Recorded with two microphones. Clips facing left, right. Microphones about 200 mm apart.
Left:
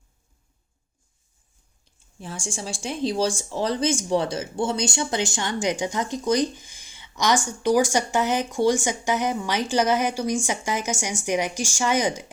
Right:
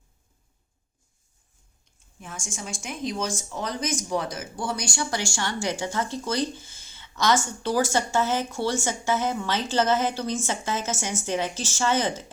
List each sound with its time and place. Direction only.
1.8 s speech: 30° left (ahead or behind); by 12.2 s 15° left (ahead or behind)